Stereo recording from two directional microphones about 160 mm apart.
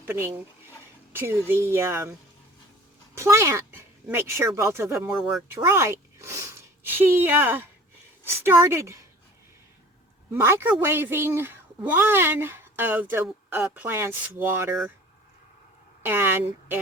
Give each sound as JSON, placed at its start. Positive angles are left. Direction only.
{"t": 0.0, "sound": "a woman's voice", "side_deg": -15}
{"t": 3.2, "sound": "a woman's voice", "side_deg": -20}
{"t": 4.9, "sound": "speech", "side_deg": 0}
{"t": 5.5, "sound": "a woman's voice", "side_deg": -15}
{"t": 10.3, "sound": "a woman's voice", "side_deg": -15}
{"t": 16.0, "sound": "a woman's voice", "side_deg": -15}